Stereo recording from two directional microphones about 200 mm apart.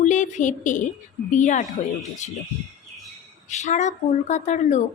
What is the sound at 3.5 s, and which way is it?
A woman's voice, 35° left (ahead or behind).